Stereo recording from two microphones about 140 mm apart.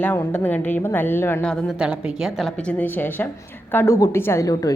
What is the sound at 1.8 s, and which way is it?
Speech, 5° right (ahead or behind).